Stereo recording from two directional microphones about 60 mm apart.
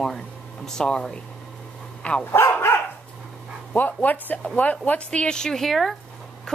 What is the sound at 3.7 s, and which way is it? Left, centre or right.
A woman's voice, left.